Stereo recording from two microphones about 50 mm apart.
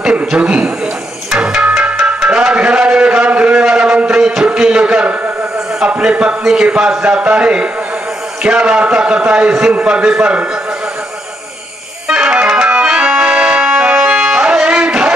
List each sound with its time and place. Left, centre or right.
0.0 s a sound: centre
0.4 s a man's voice: right
1.4 s music: right
1.8 s tabla: right
2.2 s music: right
2.9 s a sound: right
5.9 s a man's voice: right
12.1 s music: right
14.1 s music: centre
14.4 s music: right